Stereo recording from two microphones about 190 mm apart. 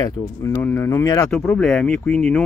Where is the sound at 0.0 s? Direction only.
15° left (ahead or behind).